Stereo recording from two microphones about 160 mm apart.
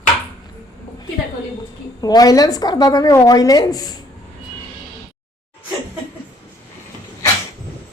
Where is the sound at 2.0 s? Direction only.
25° left (ahead or behind).